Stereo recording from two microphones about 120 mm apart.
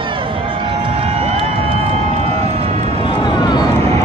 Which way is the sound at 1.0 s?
55° right (ahead or behind).